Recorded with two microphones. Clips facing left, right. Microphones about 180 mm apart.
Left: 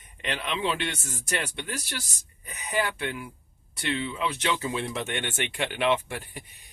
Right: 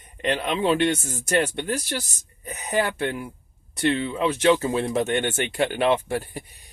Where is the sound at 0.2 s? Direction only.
45° right (ahead or behind).